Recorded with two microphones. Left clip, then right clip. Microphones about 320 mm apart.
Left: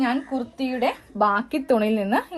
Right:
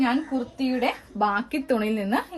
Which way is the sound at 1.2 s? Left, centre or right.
Centre.